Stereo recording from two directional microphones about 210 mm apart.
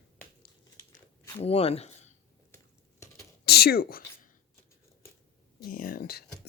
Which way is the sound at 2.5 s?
15° left (ahead or behind).